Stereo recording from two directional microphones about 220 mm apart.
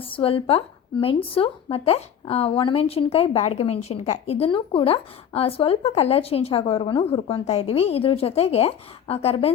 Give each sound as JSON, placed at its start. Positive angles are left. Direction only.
{"t": 0.0, "sound": "a woman's voice", "side_deg": 25}